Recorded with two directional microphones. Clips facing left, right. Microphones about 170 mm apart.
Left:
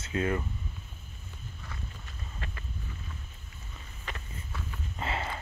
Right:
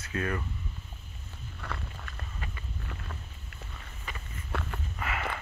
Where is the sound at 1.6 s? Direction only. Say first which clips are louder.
Right 7 dB; 70° right (ahead or behind).